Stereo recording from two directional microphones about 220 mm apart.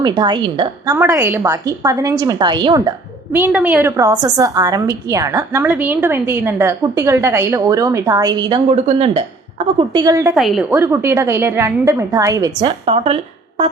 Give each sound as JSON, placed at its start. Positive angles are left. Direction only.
{"t": 0.0, "sound": "a woman's voice", "side_deg": -20}
{"t": 0.9, "sound": "a woman's voice", "side_deg": -10}
{"t": 3.5, "sound": "a woman's voice", "side_deg": -5}
{"t": 9.9, "sound": "a woman's voice", "side_deg": -15}
{"t": 10.3, "sound": "a woman's voice", "side_deg": 0}
{"t": 12.8, "sound": "a woman's voice", "side_deg": -25}